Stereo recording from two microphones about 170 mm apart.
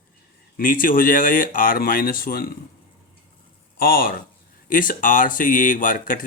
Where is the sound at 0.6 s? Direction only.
55° left (ahead or behind).